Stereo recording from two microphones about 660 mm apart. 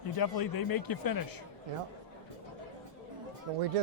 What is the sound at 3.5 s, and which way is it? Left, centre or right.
Speech, right.